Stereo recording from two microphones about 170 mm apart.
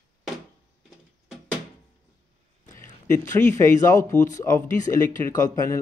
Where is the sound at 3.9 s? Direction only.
20° left (ahead or behind).